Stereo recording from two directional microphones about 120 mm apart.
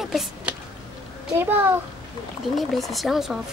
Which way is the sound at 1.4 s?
15° right (ahead or behind).